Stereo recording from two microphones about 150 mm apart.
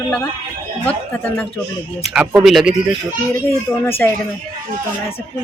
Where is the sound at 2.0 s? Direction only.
5° right (ahead or behind).